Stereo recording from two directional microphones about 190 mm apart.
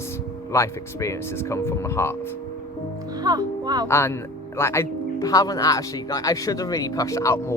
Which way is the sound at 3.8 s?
15° left (ahead or behind).